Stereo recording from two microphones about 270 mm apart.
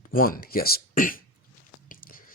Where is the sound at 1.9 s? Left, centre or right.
Left.